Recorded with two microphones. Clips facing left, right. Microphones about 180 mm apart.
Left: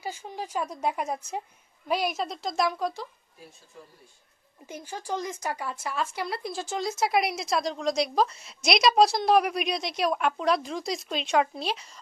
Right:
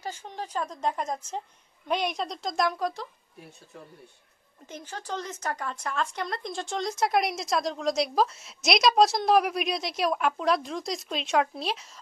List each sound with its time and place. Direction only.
0.0 s a woman's voice: 10° left (ahead or behind)
3.7 s speech: 65° right (ahead or behind)
4.6 s speech: 10° left (ahead or behind)